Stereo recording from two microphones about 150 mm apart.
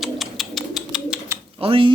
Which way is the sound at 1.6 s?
40° right (ahead or behind).